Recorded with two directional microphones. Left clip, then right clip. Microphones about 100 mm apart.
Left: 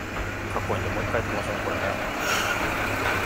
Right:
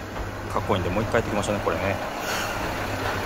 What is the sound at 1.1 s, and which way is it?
Speech, 65° right (ahead or behind).